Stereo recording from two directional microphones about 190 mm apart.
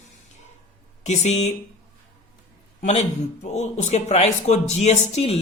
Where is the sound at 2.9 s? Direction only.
35° left (ahead or behind).